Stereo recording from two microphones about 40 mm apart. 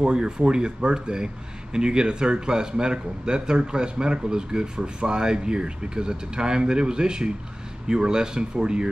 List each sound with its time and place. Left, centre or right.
0.0 s speech: right